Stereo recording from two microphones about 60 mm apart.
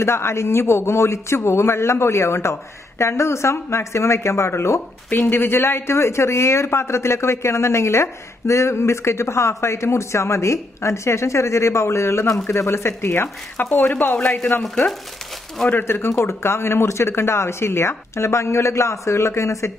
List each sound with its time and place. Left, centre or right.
0.0 s speech: left
15.8 s speech: left